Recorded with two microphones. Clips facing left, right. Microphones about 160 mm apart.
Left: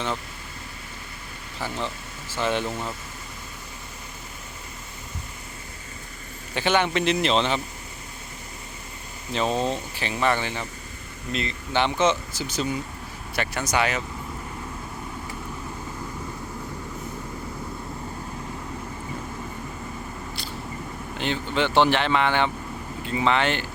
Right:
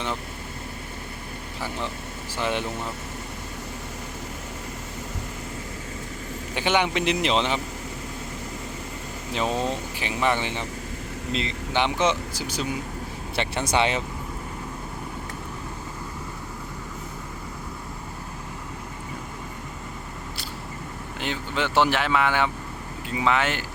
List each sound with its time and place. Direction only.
2.3 s speech: 15° right (ahead or behind)
6.5 s speech: 15° right (ahead or behind)
9.3 s speech: 10° right (ahead or behind)
13.3 s speech: 25° right (ahead or behind)
21.2 s speech: 5° right (ahead or behind)